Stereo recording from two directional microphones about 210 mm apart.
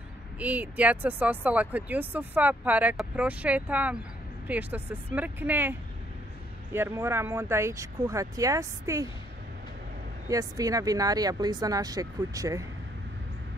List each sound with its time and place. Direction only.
0.4 s speech: 5° right (ahead or behind)
10.2 s speech: 15° right (ahead or behind)